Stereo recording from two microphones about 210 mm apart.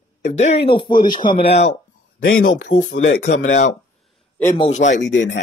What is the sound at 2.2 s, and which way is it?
Speech, 45° left (ahead or behind).